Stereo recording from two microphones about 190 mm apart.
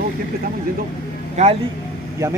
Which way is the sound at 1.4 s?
40° right (ahead or behind).